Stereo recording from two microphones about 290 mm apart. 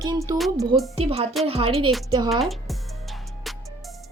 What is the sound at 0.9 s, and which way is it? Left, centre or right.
A woman's voice, right.